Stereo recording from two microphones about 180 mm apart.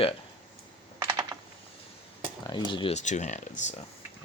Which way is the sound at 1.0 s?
20° right (ahead or behind).